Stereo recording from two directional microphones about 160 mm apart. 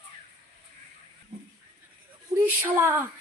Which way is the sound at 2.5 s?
15° right (ahead or behind).